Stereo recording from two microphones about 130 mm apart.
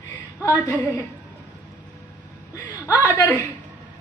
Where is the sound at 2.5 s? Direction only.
25° left (ahead or behind).